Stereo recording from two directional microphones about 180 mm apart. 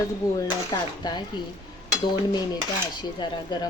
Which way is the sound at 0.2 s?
20° left (ahead or behind).